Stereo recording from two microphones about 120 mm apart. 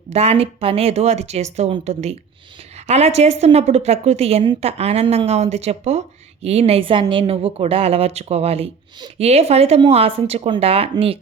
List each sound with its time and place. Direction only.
0.1 s speech: 60° right (ahead or behind)